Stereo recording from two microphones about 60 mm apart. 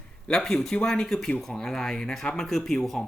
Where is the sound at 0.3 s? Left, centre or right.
Centre.